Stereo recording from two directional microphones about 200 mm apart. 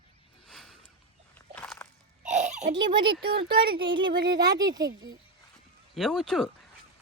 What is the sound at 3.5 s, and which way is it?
Speech, 50° right (ahead or behind).